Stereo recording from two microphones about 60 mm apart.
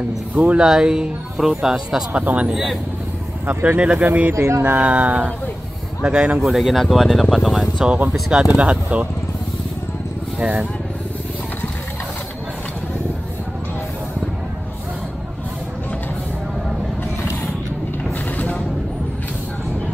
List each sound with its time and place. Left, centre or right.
0.4 s speech: right
0.7 s speech: centre
2.1 s speech: right
2.5 s speech: centre
3.4 s speech: right
3.8 s speech: right
4.3 s speech: right
4.6 s speech: right
6.4 s speech: centre
8.1 s speech: centre